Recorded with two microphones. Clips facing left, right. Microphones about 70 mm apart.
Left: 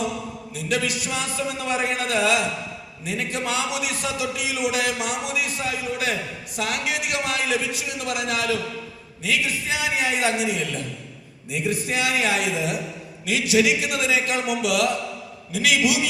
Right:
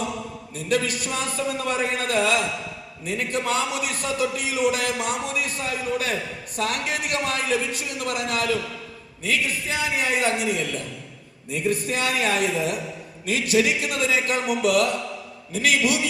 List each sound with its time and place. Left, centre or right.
0.7 s a man's voice: right